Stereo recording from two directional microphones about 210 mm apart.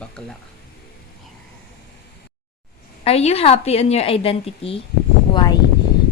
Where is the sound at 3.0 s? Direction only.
30° left (ahead or behind).